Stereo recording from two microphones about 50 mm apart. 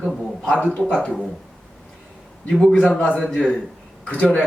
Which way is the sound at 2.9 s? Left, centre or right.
Centre.